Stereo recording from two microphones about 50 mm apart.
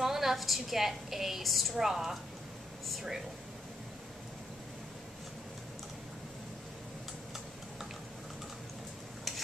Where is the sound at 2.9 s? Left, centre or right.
Centre.